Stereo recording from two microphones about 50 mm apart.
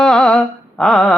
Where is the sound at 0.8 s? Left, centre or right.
Centre.